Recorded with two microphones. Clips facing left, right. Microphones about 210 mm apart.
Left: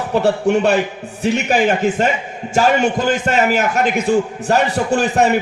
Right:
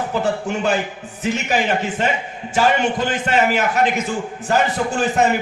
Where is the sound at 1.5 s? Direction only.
45° left (ahead or behind).